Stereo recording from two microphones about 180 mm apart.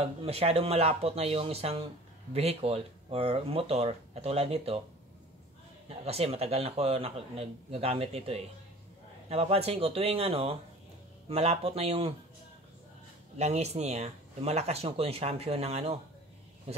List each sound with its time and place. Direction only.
0.0 s speech: 35° right (ahead or behind)
5.9 s speech: 35° right (ahead or behind)
13.4 s speech: 35° right (ahead or behind)